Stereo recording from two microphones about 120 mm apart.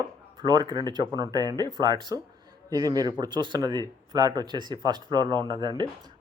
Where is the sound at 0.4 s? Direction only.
35° right (ahead or behind).